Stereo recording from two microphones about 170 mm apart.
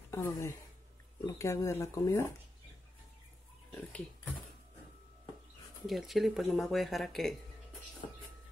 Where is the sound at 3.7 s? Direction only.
5° left (ahead or behind).